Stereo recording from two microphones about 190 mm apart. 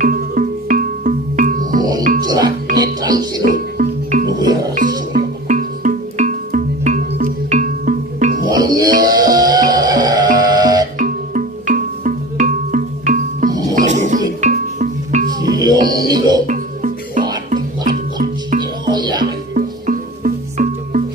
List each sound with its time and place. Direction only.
0.0 s music: 45° right (ahead or behind)
2.2 s music: 20° right (ahead or behind)
3.4 s music: 45° right (ahead or behind)
4.3 s music: 20° right (ahead or behind)
5.5 s music: 40° right (ahead or behind)
8.5 s music: 20° right (ahead or behind)
11.0 s music: 45° right (ahead or behind)
15.5 s music: 20° right (ahead or behind)
16.4 s music: 45° right (ahead or behind)
18.6 s music: 25° right (ahead or behind)
19.5 s music: 45° right (ahead or behind)